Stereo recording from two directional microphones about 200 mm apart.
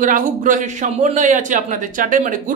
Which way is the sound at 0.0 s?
40° right (ahead or behind).